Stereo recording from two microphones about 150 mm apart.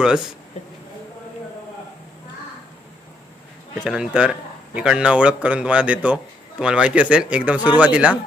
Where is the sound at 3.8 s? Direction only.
5° right (ahead or behind).